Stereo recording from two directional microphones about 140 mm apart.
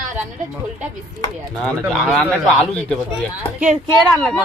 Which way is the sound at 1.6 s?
5° left (ahead or behind).